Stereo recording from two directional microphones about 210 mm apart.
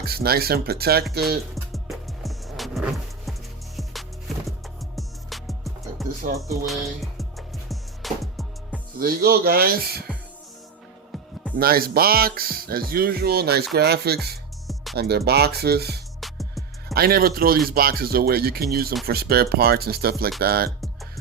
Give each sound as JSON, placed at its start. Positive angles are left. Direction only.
{"t": 0.0, "sound": "speech", "side_deg": -50}
{"t": 1.7, "sound": "music", "side_deg": 0}
{"t": 4.4, "sound": "music", "side_deg": 0}
{"t": 9.0, "sound": "speech", "side_deg": -45}
{"t": 11.6, "sound": "speech", "side_deg": -45}
{"t": 16.2, "sound": "music", "side_deg": 0}
{"t": 16.9, "sound": "speech", "side_deg": -45}